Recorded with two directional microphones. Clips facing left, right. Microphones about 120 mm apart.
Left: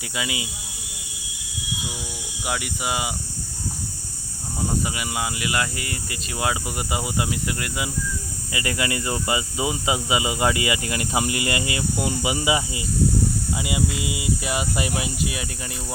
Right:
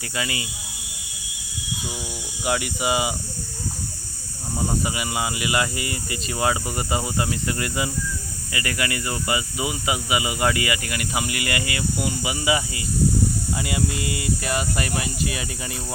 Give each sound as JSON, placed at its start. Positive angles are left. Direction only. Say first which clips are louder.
{"t": 0.1, "sound": "speech", "louder": "even", "side_deg": 10}
{"t": 2.4, "sound": "speech", "louder": "right 4 dB", "side_deg": 0}
{"t": 4.8, "sound": "speech", "louder": "right 1 dB", "side_deg": 0}
{"t": 8.5, "sound": "speech", "louder": "left 1 dB", "side_deg": 20}
{"t": 13.6, "sound": "speech", "louder": "even", "side_deg": 10}